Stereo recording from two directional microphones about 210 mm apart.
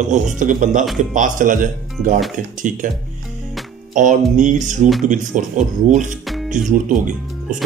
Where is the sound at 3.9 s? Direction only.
35° right (ahead or behind).